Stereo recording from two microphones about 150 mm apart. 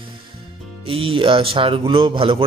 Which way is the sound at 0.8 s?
35° right (ahead or behind).